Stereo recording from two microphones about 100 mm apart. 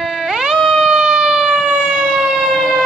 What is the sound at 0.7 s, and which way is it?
Emergency vehicle, 5° right (ahead or behind).